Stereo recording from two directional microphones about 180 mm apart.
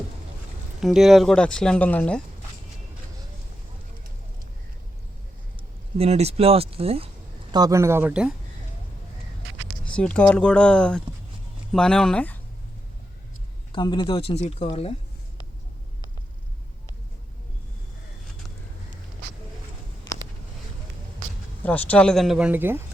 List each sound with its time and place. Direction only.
0.8 s speech: centre (ahead or behind)
5.5 s speech: 35° right (ahead or behind)
7.5 s speech: 20° right (ahead or behind)
9.9 s speech: 5° left (ahead or behind)
13.7 s speech: 25° left (ahead or behind)
21.6 s speech: 10° left (ahead or behind); by 22.8 s 10° right (ahead or behind)